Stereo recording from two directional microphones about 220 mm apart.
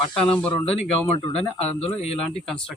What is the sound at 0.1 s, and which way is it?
Speech, 5° left (ahead or behind).